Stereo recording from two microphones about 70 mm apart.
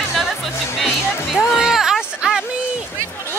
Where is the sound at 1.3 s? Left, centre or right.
Centre.